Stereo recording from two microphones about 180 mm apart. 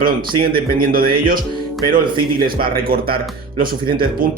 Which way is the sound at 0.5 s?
55° right (ahead or behind).